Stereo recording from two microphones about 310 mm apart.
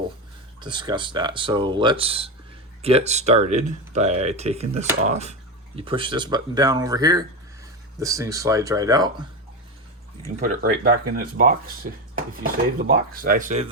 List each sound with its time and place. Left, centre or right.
0.6 s speech: centre
10.4 s speech: right